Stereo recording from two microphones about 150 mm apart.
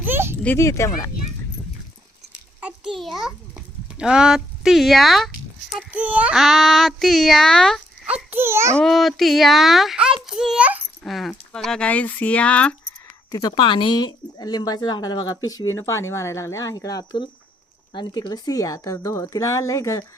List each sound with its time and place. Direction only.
0.0 s a sound: 15° right (ahead or behind)
0.4 s speech: 15° left (ahead or behind)
2.6 s a sound: 5° right (ahead or behind)
3.9 s speech: 5° right (ahead or behind)
8.0 s babbling: 10° right (ahead or behind)
8.8 s a child's voice: centre (ahead or behind)
11.0 s speech: centre (ahead or behind)
13.3 s speech: 25° left (ahead or behind)